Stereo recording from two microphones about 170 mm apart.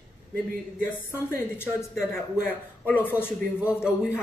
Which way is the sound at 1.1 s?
15° left (ahead or behind).